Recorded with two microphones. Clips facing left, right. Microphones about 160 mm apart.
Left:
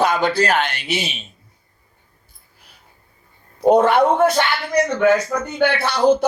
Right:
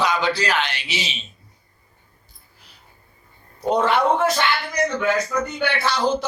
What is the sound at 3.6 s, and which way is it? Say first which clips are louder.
A man's voice: left 5 dB; 55° left (ahead or behind).